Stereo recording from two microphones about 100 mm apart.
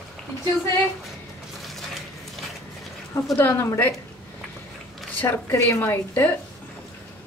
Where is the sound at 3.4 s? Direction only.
25° left (ahead or behind).